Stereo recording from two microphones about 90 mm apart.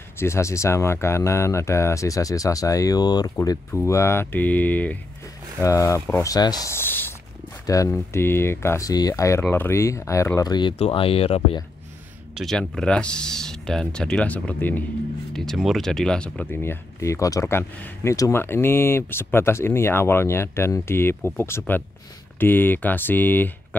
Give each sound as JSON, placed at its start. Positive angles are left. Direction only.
{"t": 0.2, "sound": "speech", "side_deg": 30}
{"t": 3.3, "sound": "speech", "side_deg": 35}
{"t": 5.6, "sound": "speech", "side_deg": 35}
{"t": 6.7, "sound": "a sound", "side_deg": 25}
{"t": 7.6, "sound": "speech", "side_deg": 40}
{"t": 8.8, "sound": "speech", "side_deg": 45}
{"t": 9.4, "sound": "speech", "side_deg": 20}
{"t": 10.4, "sound": "speech", "side_deg": 50}
{"t": 10.9, "sound": "speech", "side_deg": 90}
{"t": 12.4, "sound": "speech", "side_deg": 5}
{"t": 15.3, "sound": "speech", "side_deg": 0}
{"t": 16.5, "sound": "speech", "side_deg": 30}
{"t": 17.6, "sound": "speech", "side_deg": 25}